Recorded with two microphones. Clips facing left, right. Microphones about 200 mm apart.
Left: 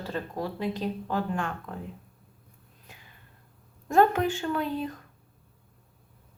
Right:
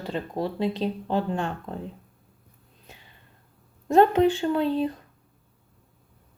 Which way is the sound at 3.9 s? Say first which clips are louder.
Right 4 dB; 20° right (ahead or behind).